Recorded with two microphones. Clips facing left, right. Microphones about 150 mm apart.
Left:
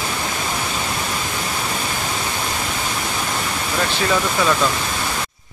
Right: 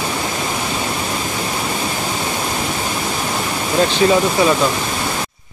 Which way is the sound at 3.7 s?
20° right (ahead or behind).